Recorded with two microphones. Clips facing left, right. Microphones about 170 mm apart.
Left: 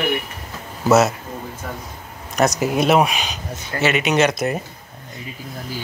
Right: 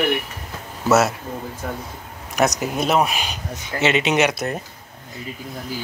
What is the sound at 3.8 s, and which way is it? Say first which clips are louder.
Speech: left 1 dB; 25° right (ahead or behind).